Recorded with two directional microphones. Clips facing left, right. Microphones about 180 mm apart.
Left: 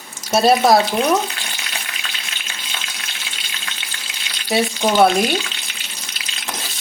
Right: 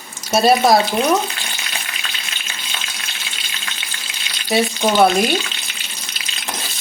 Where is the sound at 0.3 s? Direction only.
Centre (ahead or behind).